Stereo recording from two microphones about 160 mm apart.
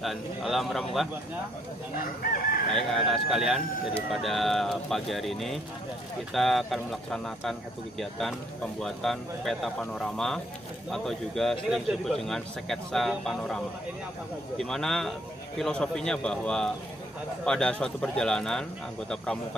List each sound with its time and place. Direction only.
0.0 s a man's voice: centre (ahead or behind)
2.0 s chicken: 65° left (ahead or behind)
2.7 s a man's voice: centre (ahead or behind)
14.6 s a man's voice: 5° left (ahead or behind)